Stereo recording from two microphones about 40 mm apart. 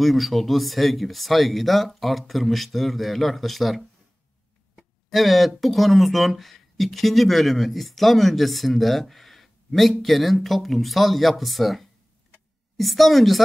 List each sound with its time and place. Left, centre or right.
0.0 s speech: centre
4.7 s a sound: centre
5.6 s speech: centre